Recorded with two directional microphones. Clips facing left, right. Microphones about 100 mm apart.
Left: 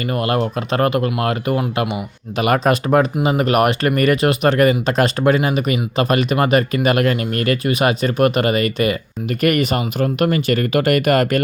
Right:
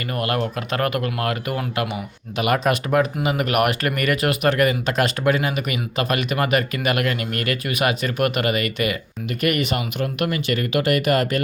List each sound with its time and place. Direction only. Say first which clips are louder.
0.1 s speech: left 4 dB; 30° left (ahead or behind); by 11.3 s 55° left (ahead or behind)